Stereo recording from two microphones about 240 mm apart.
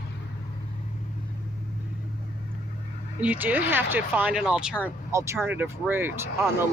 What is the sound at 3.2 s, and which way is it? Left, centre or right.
Speech, centre.